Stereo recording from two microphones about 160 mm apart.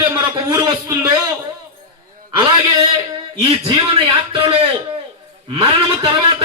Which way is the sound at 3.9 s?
35° right (ahead or behind).